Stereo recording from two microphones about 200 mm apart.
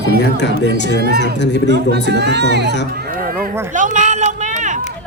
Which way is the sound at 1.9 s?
55° right (ahead or behind).